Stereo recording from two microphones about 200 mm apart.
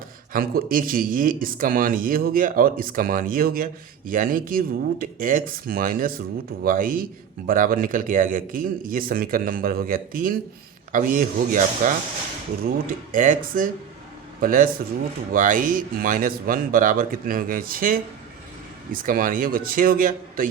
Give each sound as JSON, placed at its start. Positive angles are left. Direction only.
{"t": 0.3, "sound": "speech", "side_deg": -45}